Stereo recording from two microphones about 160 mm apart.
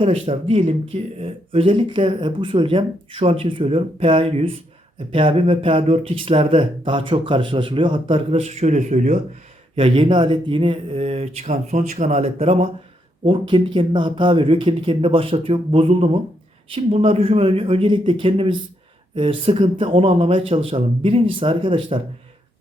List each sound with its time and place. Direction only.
0.0 s speech: 35° right (ahead or behind)
9.7 s speech: 35° right (ahead or behind)